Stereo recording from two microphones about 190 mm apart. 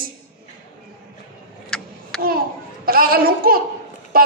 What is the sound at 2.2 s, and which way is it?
Hands, 50° right (ahead or behind).